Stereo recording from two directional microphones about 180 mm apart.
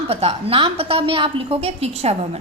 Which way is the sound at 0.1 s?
35° right (ahead or behind).